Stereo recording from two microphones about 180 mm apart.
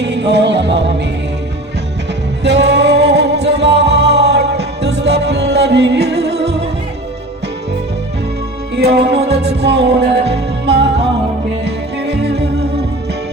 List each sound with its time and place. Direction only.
0.0 s music: 70° right (ahead or behind)
2.4 s music: 70° right (ahead or behind)
8.8 s music: 65° right (ahead or behind)